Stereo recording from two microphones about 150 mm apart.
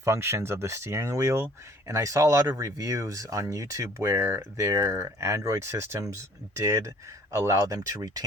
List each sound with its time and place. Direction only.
0.0 s speech: 15° right (ahead or behind)